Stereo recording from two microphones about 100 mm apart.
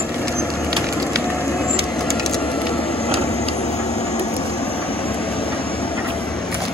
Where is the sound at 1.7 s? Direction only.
5° left (ahead or behind).